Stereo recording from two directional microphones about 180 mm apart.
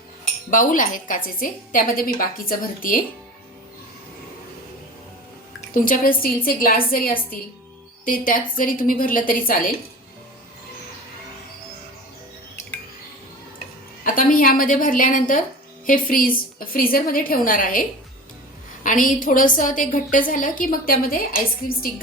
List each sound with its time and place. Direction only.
0.5 s a woman's voice: 50° left (ahead or behind)
5.7 s a woman's voice: 50° left (ahead or behind)
14.0 s a woman's voice: 50° left (ahead or behind)